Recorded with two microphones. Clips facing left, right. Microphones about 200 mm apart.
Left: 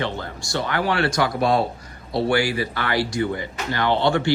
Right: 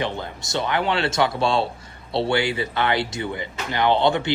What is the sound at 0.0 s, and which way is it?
A man's voice, 20° right (ahead or behind).